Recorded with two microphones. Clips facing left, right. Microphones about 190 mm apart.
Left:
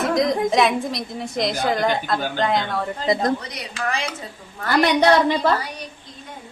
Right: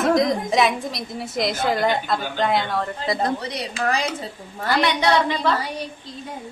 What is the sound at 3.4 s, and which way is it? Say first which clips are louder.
Speech: right 3 dB; 35° right (ahead or behind).